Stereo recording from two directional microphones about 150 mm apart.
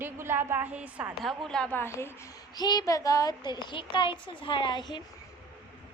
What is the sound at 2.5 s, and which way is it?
A woman's voice, 25° left (ahead or behind).